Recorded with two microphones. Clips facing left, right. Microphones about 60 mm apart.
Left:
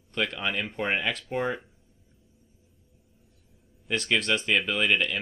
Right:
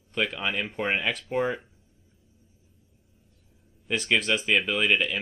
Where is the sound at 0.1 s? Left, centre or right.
Centre.